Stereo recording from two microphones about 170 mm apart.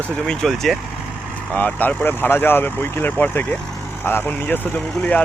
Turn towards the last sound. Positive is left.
turn(degrees=10)  # may be behind; listen again after turning